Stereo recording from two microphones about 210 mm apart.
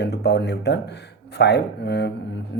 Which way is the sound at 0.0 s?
50° left (ahead or behind).